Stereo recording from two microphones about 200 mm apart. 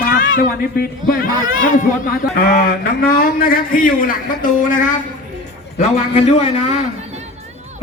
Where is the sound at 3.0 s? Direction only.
45° left (ahead or behind).